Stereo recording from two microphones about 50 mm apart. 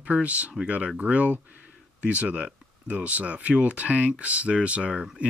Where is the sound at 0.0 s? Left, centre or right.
Right.